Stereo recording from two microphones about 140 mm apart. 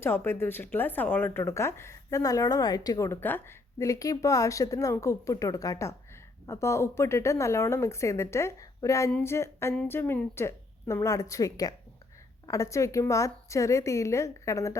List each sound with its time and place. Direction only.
0.0 s speech: 15° left (ahead or behind)
9.2 s a sound: 20° left (ahead or behind)
9.7 s speech: 15° left (ahead or behind)